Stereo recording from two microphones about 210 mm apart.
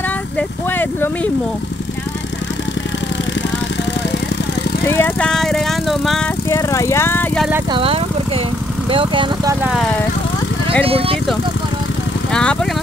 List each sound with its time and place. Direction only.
0.4 s speech: 10° left (ahead or behind)
4.8 s vehicle: 10° left (ahead or behind)
6.5 s vehicle: 15° left (ahead or behind)
7.7 s speech: 25° right (ahead or behind)
10.9 s speech: 25° right (ahead or behind)
12.3 s speech: 5° left (ahead or behind)